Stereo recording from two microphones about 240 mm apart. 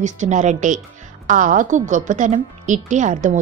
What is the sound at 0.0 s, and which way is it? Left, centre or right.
Speech, right.